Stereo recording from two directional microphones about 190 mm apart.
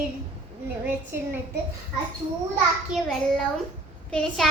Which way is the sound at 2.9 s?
Centre (ahead or behind).